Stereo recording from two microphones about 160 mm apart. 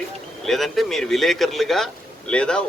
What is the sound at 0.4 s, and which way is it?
Speech, centre (ahead or behind).